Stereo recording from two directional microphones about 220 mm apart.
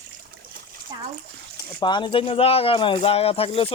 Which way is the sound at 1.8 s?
20° left (ahead or behind).